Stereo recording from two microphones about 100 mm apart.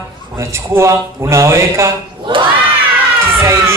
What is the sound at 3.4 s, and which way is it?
Speech, 25° right (ahead or behind).